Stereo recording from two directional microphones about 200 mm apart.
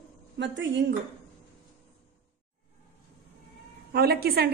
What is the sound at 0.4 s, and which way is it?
Speech, 60° right (ahead or behind).